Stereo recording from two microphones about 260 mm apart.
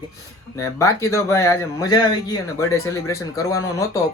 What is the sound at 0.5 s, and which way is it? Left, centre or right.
Speech, centre.